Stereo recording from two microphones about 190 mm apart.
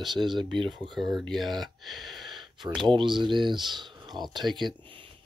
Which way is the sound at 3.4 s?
25° right (ahead or behind).